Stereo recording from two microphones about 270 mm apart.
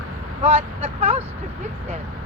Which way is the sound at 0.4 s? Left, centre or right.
Right.